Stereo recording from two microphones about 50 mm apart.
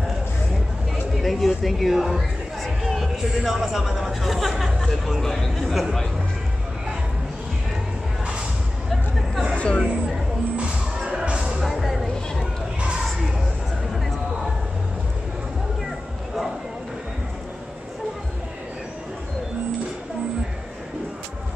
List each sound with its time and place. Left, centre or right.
1.2 s speech: centre
9.6 s speech: centre
11.1 s music: centre
11.6 s a sound: centre